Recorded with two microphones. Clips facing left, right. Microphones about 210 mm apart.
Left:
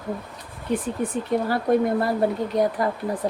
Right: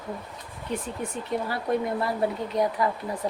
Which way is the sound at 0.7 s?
35° left (ahead or behind).